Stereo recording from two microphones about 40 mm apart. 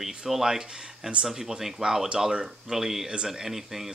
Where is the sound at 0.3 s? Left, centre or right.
Centre.